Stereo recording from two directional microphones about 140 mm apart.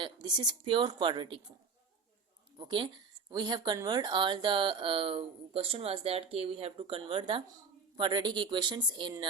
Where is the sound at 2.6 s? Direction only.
35° right (ahead or behind).